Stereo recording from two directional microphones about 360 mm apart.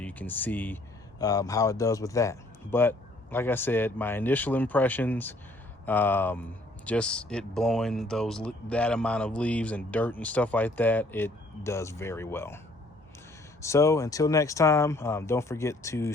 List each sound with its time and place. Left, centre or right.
0.0 s speech: centre
13.6 s speech: centre